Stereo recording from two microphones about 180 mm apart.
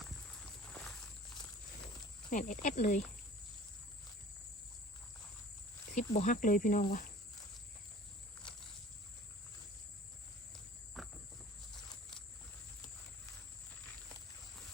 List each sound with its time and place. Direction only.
0.7 s walk: centre (ahead or behind)
2.3 s speech: 45° left (ahead or behind)
5.9 s speech: 40° left (ahead or behind)
10.5 s cricket: centre (ahead or behind)